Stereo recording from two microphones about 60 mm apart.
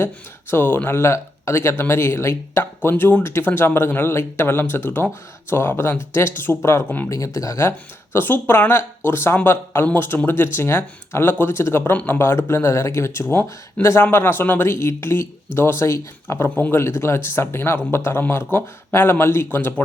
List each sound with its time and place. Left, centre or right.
0.5 s speech: left
3.0 s speech: left
6.8 s speech: left
7.3 s speech: left
14.7 s speech: left